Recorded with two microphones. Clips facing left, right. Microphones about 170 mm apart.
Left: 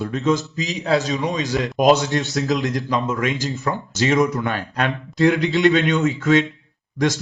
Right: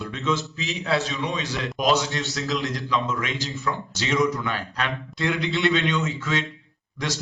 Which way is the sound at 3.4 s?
40° left (ahead or behind).